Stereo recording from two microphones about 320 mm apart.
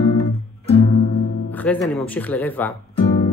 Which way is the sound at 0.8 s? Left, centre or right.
Centre.